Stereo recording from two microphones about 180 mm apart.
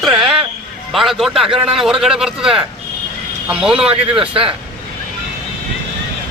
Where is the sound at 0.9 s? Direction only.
Centre (ahead or behind).